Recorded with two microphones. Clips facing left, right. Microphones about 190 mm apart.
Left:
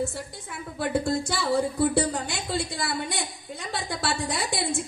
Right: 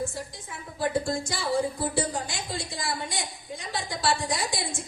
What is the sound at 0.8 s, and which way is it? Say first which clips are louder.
A woman's voice: left 2 dB; 65° left (ahead or behind).